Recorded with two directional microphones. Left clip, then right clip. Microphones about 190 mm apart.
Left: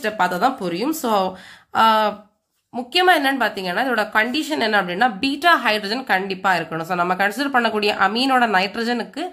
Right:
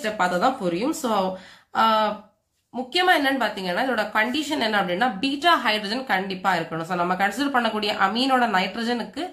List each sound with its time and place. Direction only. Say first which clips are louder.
0.0 s a woman's voice: left 3 dB; 35° left (ahead or behind)